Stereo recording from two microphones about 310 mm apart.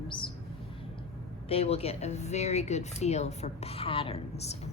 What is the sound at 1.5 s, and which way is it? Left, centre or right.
Speech, centre.